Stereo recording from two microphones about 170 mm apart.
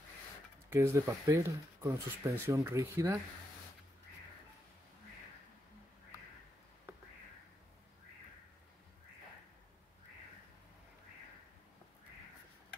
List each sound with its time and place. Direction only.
0.7 s speech: 15° right (ahead or behind)